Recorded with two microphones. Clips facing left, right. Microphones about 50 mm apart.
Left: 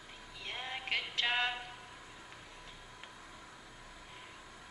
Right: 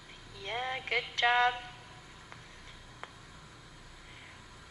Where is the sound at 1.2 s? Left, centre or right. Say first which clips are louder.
Right 8 dB; right.